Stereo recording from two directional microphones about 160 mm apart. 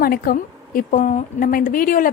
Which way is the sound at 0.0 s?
65° left (ahead or behind).